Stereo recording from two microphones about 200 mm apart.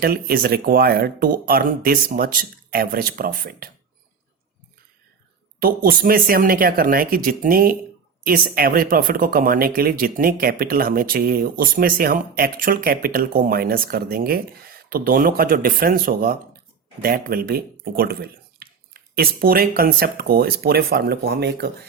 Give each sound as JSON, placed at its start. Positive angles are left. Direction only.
{"t": 0.0, "sound": "speech", "side_deg": -50}
{"t": 5.5, "sound": "speech", "side_deg": -45}